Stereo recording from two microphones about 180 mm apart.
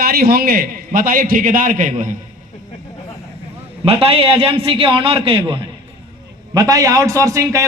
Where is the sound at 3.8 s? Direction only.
30° right (ahead or behind).